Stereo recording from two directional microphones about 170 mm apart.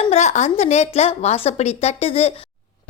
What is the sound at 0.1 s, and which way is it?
A woman's voice, 40° left (ahead or behind).